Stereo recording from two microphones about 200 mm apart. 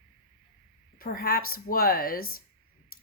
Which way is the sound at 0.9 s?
50° left (ahead or behind).